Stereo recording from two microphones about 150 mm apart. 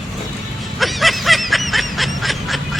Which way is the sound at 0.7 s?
Centre (ahead or behind).